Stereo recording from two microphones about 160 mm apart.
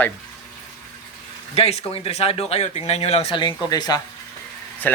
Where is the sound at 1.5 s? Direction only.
40° left (ahead or behind).